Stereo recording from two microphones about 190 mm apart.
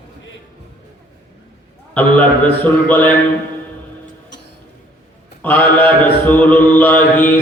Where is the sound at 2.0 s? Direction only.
10° left (ahead or behind).